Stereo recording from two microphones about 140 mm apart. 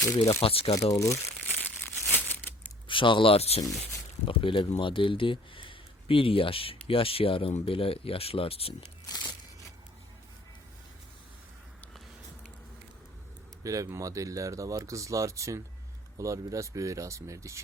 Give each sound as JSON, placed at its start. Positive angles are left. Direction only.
{"t": 0.0, "sound": "speech", "side_deg": 25}
{"t": 0.4, "sound": "speech", "side_deg": 45}
{"t": 0.7, "sound": "speech", "side_deg": 25}
{"t": 2.1, "sound": "crumpling", "side_deg": 15}
{"t": 2.8, "sound": "speech", "side_deg": 35}
{"t": 9.0, "sound": "a sound", "side_deg": 30}
{"t": 13.7, "sound": "speech", "side_deg": -25}